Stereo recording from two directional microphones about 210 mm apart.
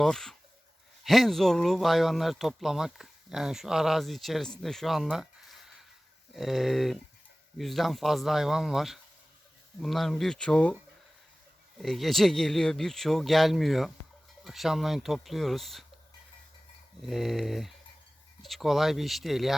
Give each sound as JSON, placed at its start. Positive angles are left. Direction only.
{"t": 0.0, "sound": "speech", "side_deg": 0}
{"t": 11.8, "sound": "speech", "side_deg": 0}
{"t": 17.0, "sound": "speech", "side_deg": 0}